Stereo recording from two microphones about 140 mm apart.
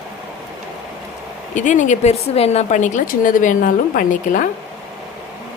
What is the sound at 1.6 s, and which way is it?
A woman's voice, 60° left (ahead or behind).